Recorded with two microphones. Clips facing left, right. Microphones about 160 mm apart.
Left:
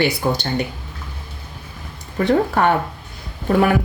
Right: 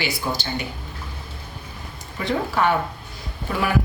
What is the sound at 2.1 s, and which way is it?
Speech, 50° left (ahead or behind).